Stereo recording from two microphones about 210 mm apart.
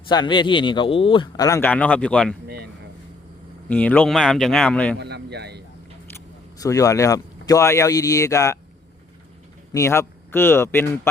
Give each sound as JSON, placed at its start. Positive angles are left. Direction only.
{"t": 0.1, "sound": "speech", "side_deg": 20}
{"t": 3.7, "sound": "a man's voice", "side_deg": 5}
{"t": 4.9, "sound": "a man's voice", "side_deg": -50}
{"t": 6.6, "sound": "speech", "side_deg": 15}
{"t": 9.7, "sound": "speech", "side_deg": 15}